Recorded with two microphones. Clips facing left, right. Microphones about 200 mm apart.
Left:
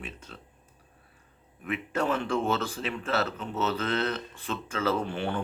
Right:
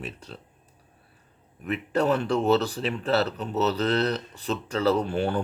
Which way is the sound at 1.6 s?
35° right (ahead or behind).